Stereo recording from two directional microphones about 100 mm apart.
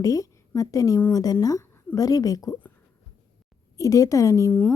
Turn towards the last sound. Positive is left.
turn(degrees=30)  # may be behind; listen again after turning